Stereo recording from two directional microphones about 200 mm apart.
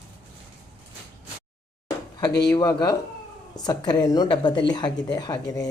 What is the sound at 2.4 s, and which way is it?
Speech, 20° left (ahead or behind).